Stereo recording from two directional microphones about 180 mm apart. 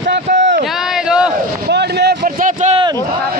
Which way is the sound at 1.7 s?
70° right (ahead or behind).